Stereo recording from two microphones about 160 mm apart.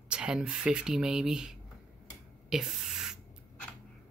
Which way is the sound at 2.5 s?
5° right (ahead or behind).